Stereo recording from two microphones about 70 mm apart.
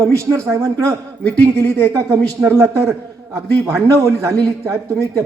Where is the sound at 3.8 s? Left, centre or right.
Right.